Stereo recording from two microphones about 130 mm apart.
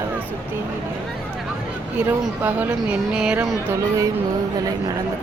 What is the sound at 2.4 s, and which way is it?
Speech, 15° right (ahead or behind).